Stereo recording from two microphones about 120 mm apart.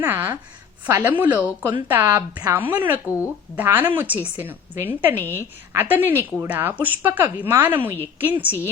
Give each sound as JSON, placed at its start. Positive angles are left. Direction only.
{"t": 0.0, "sound": "speech", "side_deg": -15}